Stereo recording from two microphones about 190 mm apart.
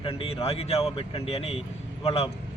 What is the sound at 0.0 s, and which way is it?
Speech, 30° left (ahead or behind).